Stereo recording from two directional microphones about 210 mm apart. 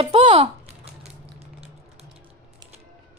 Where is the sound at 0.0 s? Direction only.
25° right (ahead or behind).